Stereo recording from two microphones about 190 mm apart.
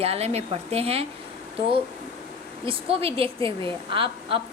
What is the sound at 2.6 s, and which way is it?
A woman's voice, 30° right (ahead or behind).